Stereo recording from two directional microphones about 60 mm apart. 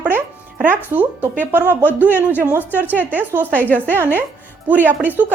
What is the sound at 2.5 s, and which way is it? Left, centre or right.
A woman's voice, right.